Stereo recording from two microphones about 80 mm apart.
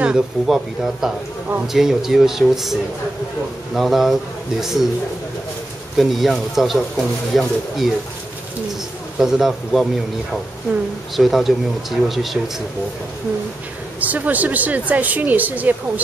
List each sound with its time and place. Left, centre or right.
0.0 s speech: centre
5.9 s speech: centre
9.2 s speech: centre
11.1 s speech: centre
14.0 s speech: centre